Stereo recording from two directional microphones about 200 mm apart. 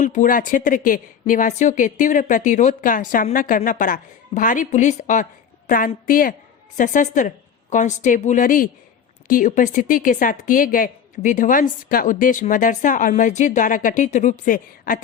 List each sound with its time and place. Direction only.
0.0 s speech: 40° left (ahead or behind)